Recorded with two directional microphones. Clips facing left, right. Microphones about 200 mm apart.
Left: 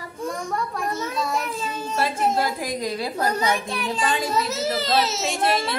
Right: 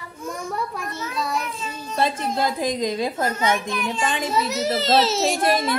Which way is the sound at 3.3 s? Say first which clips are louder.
Right 1 dB; 35° left (ahead or behind).